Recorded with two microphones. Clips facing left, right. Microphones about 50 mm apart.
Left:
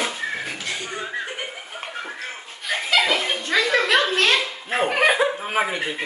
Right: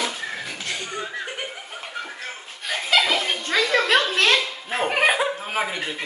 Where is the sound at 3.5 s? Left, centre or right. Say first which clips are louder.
Even; left.